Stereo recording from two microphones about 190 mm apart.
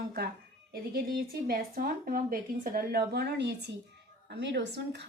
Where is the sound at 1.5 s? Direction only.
55° right (ahead or behind).